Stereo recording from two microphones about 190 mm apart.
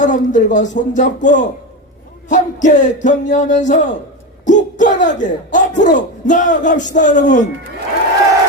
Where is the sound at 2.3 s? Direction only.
40° left (ahead or behind).